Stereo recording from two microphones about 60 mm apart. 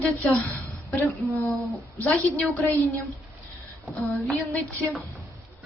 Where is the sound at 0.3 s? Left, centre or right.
Left.